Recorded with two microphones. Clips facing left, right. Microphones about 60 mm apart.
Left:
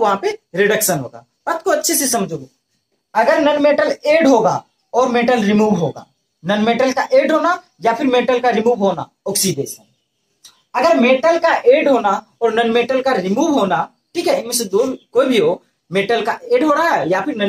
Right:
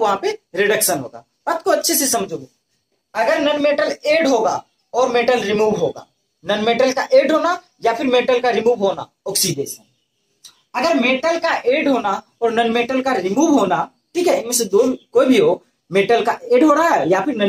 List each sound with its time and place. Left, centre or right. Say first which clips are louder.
0.0 s speech: left 2 dB; left
0.7 s speech: left 1 dB; centre
1.8 s speech: left 1 dB; centre
2.1 s speech: left 2 dB; centre
3.3 s speech: left 3 dB; left
10.7 s speech: left 4 dB; left
11.8 s speech: left 3 dB; centre